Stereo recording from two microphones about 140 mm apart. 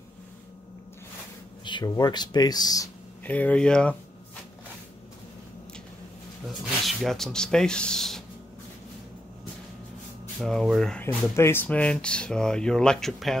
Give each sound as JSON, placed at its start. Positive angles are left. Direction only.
{"t": 1.6, "sound": "speech", "side_deg": 35}
{"t": 3.3, "sound": "speech", "side_deg": 10}
{"t": 6.5, "sound": "speech", "side_deg": 0}
{"t": 10.4, "sound": "speech", "side_deg": 0}